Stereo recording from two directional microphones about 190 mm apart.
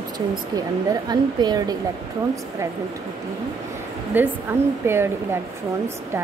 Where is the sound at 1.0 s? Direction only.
20° right (ahead or behind).